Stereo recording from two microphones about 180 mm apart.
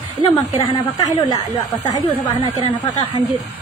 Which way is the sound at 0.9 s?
20° left (ahead or behind).